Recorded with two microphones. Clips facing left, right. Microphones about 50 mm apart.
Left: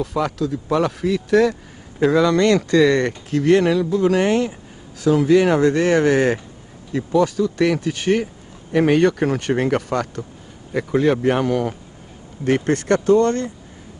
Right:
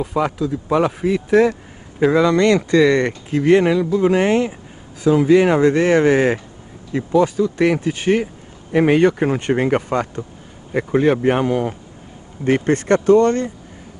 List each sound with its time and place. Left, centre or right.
0.0 s speech: right